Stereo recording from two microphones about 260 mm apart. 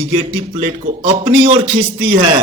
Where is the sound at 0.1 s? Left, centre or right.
Right.